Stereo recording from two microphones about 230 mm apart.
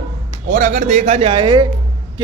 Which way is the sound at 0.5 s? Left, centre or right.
Right.